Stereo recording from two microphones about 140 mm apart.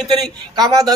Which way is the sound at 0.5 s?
25° right (ahead or behind).